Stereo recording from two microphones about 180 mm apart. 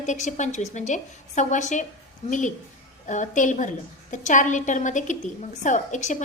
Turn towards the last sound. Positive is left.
turn(degrees=40)  # may be behind; listen again after turning